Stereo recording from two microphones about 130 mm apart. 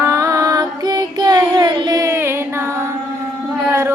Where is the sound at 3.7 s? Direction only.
20° right (ahead or behind).